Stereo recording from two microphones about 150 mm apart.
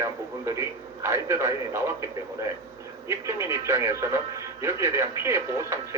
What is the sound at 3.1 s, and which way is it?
Speech, 20° right (ahead or behind).